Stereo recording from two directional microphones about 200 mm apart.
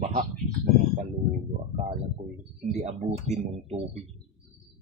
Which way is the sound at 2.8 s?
35° right (ahead or behind).